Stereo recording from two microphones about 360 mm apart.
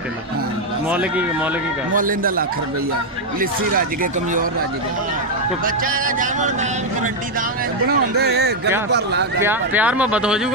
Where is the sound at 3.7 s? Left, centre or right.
Right.